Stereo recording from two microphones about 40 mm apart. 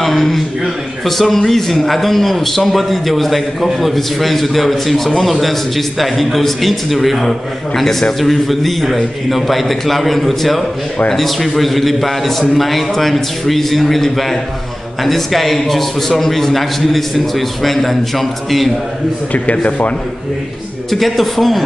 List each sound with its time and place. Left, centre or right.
0.0 s a sound: centre
1.0 s a man's voice: centre
19.3 s speech: left
20.9 s a man's voice: centre